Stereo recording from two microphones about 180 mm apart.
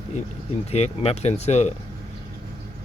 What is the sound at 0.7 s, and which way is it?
Speech, 35° left (ahead or behind).